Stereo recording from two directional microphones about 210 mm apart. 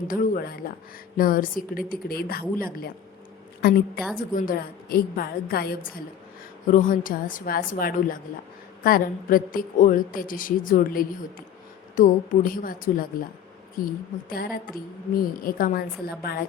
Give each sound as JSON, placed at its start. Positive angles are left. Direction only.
{"t": 0.1, "sound": "a woman's voice", "side_deg": 45}
{"t": 14.3, "sound": "a woman's voice", "side_deg": 45}